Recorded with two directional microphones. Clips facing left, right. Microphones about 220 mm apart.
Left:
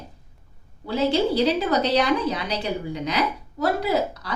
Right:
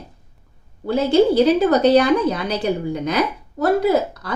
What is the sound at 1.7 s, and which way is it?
A woman's voice, 50° right (ahead or behind).